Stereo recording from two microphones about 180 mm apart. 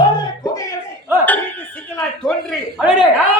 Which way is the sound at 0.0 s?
20° left (ahead or behind).